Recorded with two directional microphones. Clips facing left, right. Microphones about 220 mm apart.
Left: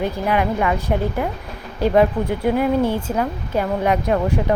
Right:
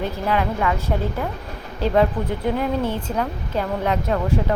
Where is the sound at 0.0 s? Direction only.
15° left (ahead or behind).